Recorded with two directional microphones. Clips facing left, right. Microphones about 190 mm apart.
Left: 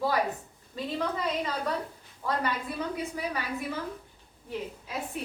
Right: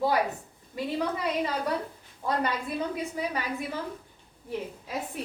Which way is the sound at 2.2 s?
15° right (ahead or behind).